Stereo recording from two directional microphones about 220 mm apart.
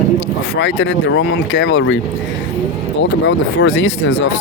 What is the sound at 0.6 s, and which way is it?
Speech, 55° left (ahead or behind).